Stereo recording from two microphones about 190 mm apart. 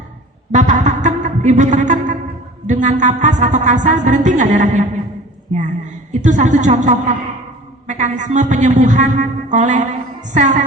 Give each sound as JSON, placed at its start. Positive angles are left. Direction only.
{"t": 0.5, "sound": "music", "side_deg": -40}
{"t": 2.6, "sound": "speech", "side_deg": -40}
{"t": 6.1, "sound": "speech", "side_deg": -40}